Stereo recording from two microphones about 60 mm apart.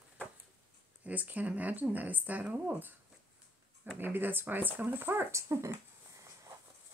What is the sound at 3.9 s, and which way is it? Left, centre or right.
Speech, right.